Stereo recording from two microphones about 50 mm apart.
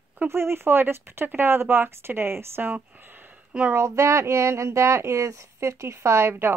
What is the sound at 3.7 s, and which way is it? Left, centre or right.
Speech, right.